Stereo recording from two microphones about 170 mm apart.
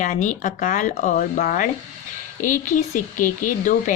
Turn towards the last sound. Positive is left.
turn(degrees=50)  # may be behind; listen again after turning